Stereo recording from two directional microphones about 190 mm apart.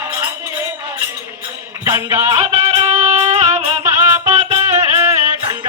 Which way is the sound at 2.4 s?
30° right (ahead or behind).